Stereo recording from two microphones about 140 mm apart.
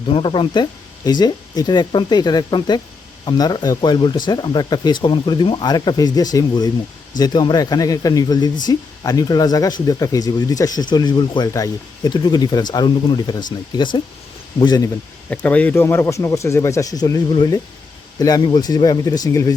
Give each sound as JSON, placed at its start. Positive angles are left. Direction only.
{"t": 0.1, "sound": "speech", "side_deg": 35}
{"t": 15.3, "sound": "speech", "side_deg": 10}